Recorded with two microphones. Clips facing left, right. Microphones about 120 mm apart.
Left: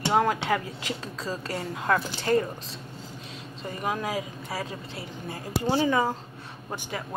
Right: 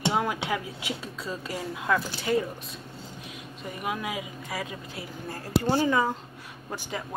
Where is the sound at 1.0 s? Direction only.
90° left.